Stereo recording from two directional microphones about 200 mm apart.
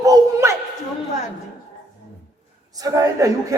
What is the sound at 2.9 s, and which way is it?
Speech, 15° right (ahead or behind).